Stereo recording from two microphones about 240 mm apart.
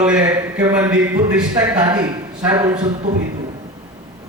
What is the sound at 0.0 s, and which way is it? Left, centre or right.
A man's voice, centre.